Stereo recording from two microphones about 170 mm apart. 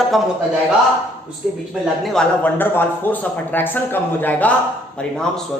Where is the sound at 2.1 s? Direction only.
10° left (ahead or behind).